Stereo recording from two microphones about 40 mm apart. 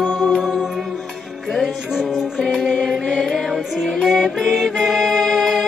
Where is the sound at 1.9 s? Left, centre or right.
Centre.